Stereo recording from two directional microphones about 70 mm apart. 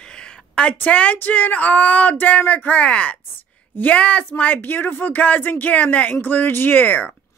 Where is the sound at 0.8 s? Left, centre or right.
Left.